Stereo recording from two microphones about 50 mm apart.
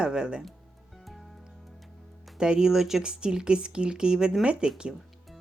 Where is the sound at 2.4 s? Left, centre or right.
Centre.